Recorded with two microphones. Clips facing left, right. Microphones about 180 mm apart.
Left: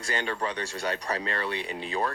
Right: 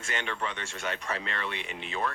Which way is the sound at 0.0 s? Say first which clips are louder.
Left 4 dB; 35° left (ahead or behind).